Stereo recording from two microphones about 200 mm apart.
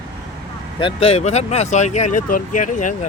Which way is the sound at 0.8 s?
25° left (ahead or behind).